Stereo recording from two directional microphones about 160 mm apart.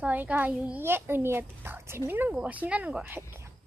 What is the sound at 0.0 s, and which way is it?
A child's voice, 10° right (ahead or behind).